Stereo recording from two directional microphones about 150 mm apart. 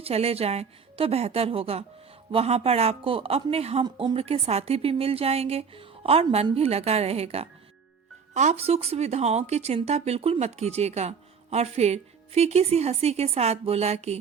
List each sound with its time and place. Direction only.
0.0 s speech: 45° right (ahead or behind)